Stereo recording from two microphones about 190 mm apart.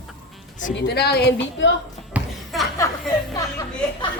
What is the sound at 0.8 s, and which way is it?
Speech, 60° left (ahead or behind).